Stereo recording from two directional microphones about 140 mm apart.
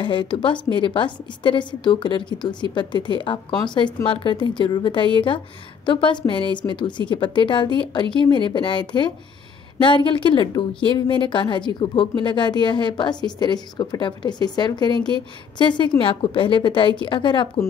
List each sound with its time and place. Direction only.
0.0 s a woman's voice: 35° left (ahead or behind)